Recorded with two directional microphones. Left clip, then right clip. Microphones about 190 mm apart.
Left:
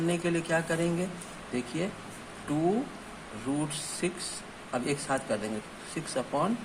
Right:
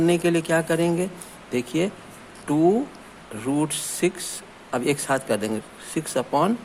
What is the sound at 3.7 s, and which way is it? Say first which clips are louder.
A man's voice: right 9 dB; 40° right (ahead or behind).